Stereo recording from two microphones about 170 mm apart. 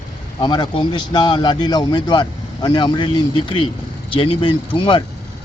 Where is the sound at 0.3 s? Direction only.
25° left (ahead or behind).